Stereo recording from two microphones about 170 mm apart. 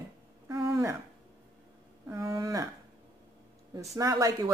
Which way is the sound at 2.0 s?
20° right (ahead or behind).